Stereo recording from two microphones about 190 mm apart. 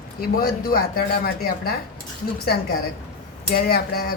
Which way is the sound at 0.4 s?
50° left (ahead or behind).